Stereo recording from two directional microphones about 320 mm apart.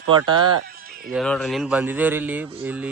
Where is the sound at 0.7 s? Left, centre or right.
Right.